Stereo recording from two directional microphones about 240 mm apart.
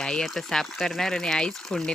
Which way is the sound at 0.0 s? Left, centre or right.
Centre.